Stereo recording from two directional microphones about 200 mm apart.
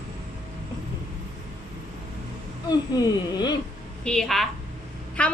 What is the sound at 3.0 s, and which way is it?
Speech, 20° left (ahead or behind).